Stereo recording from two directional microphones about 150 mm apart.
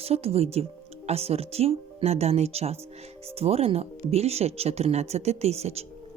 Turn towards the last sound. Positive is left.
turn(degrees=-45)  # may be behind; listen again after turning